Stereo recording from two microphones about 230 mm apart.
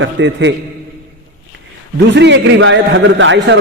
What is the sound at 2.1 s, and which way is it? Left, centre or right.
A man's voice, right.